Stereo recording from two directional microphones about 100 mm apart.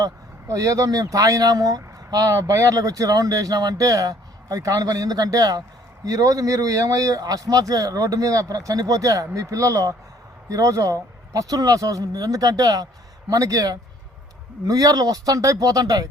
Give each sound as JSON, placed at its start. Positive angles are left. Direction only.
{"t": 0.0, "sound": "speech", "side_deg": -35}